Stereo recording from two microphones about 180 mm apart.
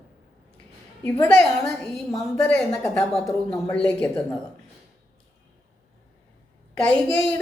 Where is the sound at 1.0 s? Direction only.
10° left (ahead or behind).